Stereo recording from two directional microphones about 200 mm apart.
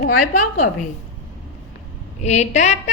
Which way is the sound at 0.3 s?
40° left (ahead or behind).